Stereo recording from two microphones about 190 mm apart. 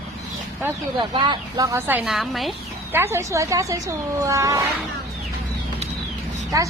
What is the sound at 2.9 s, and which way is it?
Speech, 15° right (ahead or behind).